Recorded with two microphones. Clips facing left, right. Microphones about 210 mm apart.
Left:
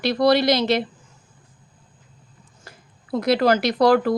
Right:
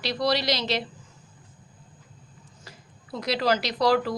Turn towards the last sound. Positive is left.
turn(degrees=55)  # may be behind; listen again after turning